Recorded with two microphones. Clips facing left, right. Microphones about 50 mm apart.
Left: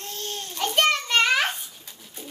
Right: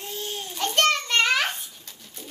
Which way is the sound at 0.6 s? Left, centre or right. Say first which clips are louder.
Even; centre.